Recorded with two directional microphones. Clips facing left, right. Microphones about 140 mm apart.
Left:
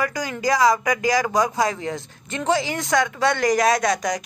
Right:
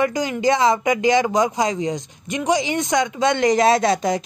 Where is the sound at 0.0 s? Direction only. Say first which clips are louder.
Right 5 dB; 20° right (ahead or behind).